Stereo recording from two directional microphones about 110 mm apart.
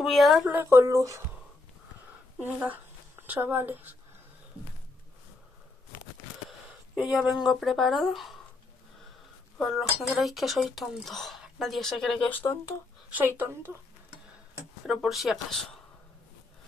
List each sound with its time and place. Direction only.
0.0 s speech: centre (ahead or behind)
0.5 s speech: 20° right (ahead or behind)
2.4 s speech: 15° right (ahead or behind)
7.0 s speech: 5° right (ahead or behind)
9.6 s speech: centre (ahead or behind)
12.3 s speech: 20° left (ahead or behind)
15.0 s speech: centre (ahead or behind)